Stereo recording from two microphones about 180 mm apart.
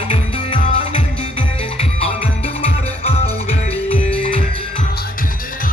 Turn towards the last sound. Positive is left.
turn(degrees=30)  # may be behind; listen again after turning